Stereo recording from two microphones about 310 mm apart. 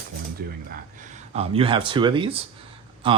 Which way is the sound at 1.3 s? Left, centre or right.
Centre.